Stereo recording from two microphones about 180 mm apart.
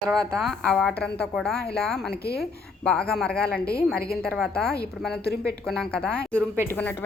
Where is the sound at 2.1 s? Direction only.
60° left (ahead or behind).